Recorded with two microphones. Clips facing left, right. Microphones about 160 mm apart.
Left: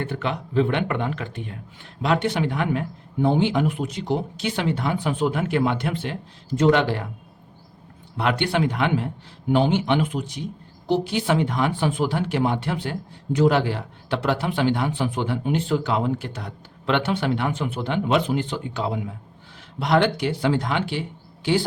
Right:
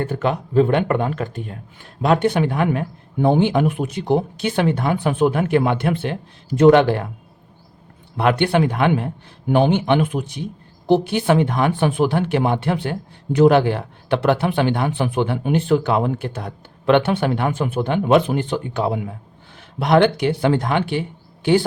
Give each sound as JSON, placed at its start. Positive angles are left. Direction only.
{"t": 0.0, "sound": "speech", "side_deg": -45}
{"t": 8.1, "sound": "speech", "side_deg": -55}